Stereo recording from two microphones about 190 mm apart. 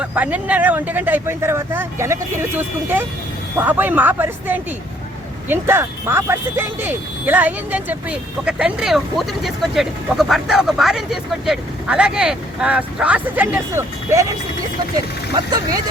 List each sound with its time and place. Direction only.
0.0 s speech: 10° right (ahead or behind)
3.6 s speech: 10° right (ahead or behind)
15.4 s speech: 20° right (ahead or behind)